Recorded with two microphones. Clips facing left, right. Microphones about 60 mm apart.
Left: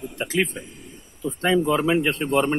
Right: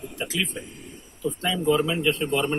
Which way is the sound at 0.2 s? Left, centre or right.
Left.